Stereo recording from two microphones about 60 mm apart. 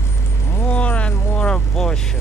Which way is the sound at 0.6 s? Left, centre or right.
Left.